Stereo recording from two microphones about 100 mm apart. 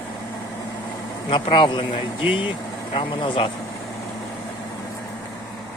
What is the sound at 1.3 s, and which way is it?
A man's voice, 55° left (ahead or behind).